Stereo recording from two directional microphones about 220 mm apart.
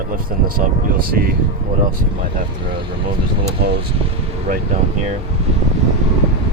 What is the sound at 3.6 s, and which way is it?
Speech, 45° right (ahead or behind).